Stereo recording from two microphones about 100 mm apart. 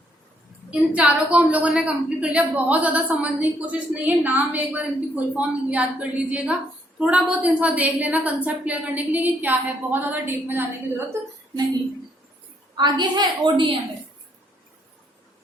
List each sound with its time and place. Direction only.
0.7 s a woman's voice: 10° right (ahead or behind)
12.7 s a woman's voice: 45° right (ahead or behind)